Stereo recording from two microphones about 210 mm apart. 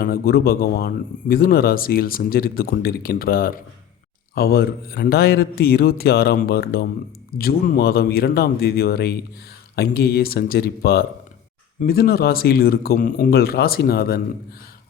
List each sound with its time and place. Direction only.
0.0 s speech: 45° left (ahead or behind)